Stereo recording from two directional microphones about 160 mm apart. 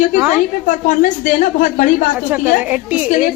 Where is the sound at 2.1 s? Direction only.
10° right (ahead or behind).